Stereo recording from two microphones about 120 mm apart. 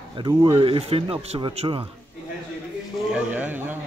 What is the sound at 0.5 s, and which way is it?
Speech, 50° right (ahead or behind).